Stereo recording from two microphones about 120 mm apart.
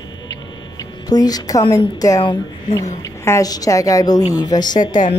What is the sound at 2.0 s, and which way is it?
A woman's voice, 30° left (ahead or behind).